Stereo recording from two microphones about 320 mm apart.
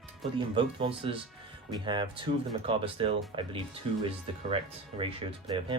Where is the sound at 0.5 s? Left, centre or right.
Centre.